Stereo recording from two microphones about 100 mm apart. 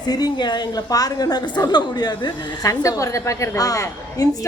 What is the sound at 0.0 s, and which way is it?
A woman's voice, 40° left (ahead or behind).